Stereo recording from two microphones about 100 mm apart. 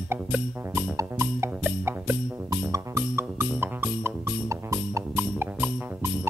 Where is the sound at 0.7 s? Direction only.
25° right (ahead or behind).